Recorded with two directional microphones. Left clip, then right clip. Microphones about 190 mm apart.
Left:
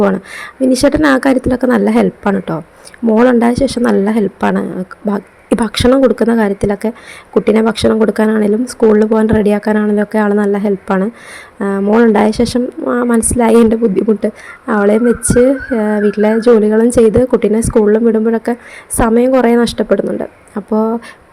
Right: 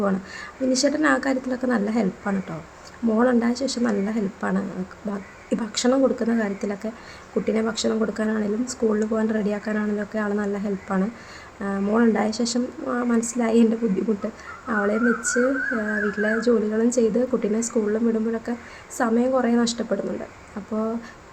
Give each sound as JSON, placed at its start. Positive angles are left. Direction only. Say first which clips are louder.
{"t": 0.0, "sound": "speech", "louder": "left 12 dB", "side_deg": 45}